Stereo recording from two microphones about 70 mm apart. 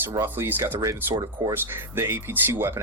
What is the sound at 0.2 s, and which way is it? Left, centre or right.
Speech, right.